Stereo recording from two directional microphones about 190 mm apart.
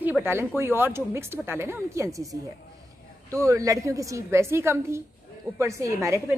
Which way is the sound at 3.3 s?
15° right (ahead or behind).